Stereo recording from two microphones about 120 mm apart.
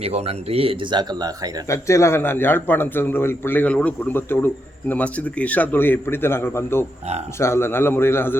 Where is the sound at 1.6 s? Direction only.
25° left (ahead or behind).